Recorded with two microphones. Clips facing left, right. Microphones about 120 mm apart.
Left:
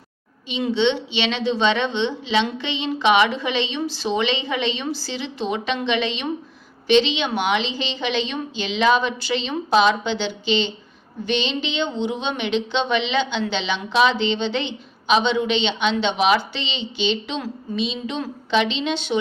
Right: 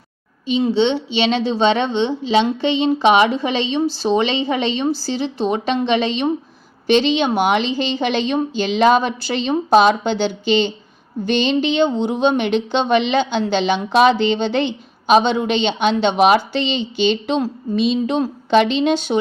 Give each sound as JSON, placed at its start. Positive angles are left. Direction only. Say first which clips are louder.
{"t": 0.4, "sound": "a woman's voice", "louder": "right 4 dB", "side_deg": -35}